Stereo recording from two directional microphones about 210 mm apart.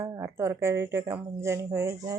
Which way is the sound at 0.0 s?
15° right (ahead or behind).